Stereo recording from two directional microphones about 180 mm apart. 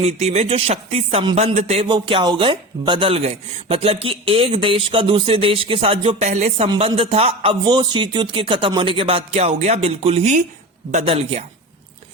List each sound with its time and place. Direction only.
0.0 s speech: 35° right (ahead or behind)